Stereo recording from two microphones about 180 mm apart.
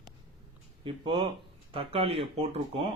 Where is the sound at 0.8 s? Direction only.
30° right (ahead or behind).